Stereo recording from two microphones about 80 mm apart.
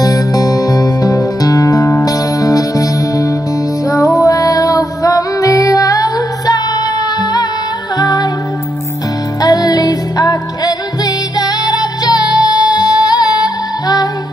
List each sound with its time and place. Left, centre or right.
0.0 s music: left
9.4 s music: left